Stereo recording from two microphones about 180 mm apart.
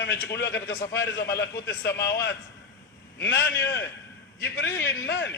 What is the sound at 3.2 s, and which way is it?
A man's voice, 75° left (ahead or behind).